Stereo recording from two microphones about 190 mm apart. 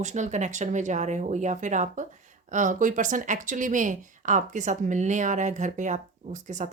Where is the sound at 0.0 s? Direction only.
40° right (ahead or behind).